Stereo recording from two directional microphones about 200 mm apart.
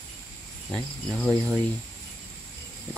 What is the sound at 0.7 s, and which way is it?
Speech, centre (ahead or behind).